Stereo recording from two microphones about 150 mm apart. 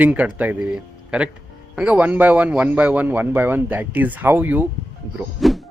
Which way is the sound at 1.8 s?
10° right (ahead or behind).